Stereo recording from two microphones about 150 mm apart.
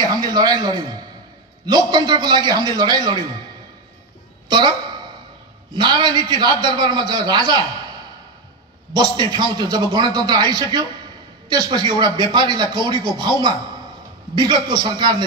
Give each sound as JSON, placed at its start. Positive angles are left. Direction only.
{"t": 0.0, "sound": "a man's voice", "side_deg": -25}
{"t": 4.5, "sound": "a woman's voice", "side_deg": -30}
{"t": 5.8, "sound": "speech", "side_deg": -30}